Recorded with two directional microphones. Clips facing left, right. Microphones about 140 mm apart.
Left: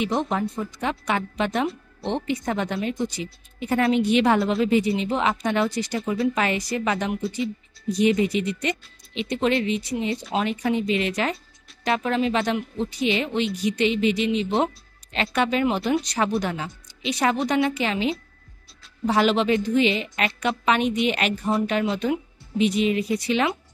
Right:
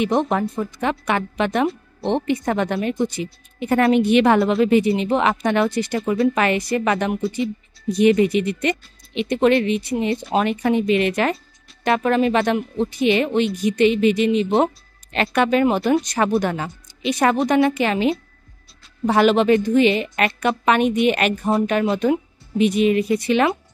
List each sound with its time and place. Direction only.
0.0 s speech: 60° right (ahead or behind)